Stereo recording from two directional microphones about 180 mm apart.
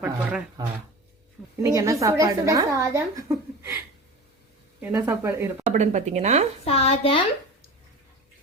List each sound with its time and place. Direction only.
0.0 s speech: 5° right (ahead or behind)
1.6 s a woman's voice: 15° right (ahead or behind)
4.8 s a woman's voice: 10° right (ahead or behind)
5.7 s speech: 40° right (ahead or behind)
6.7 s speech: 35° left (ahead or behind)